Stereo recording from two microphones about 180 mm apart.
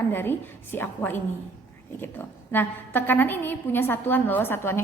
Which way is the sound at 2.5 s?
10° left (ahead or behind).